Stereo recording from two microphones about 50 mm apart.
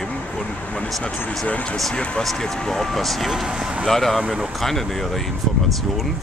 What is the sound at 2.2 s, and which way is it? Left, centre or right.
Speech, centre.